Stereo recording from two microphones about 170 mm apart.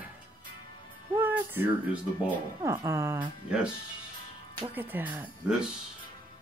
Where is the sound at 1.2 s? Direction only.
10° right (ahead or behind).